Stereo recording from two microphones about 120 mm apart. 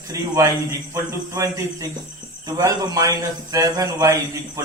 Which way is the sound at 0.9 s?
25° right (ahead or behind).